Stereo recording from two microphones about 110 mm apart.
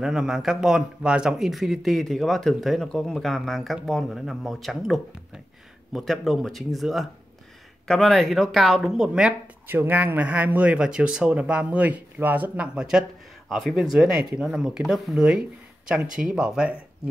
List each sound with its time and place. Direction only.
0.0 s speech: 5° right (ahead or behind)
9.7 s a man's voice: 20° right (ahead or behind)